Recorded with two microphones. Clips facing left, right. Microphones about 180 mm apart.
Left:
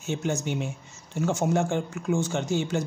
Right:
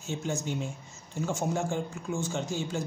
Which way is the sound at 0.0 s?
75° left (ahead or behind).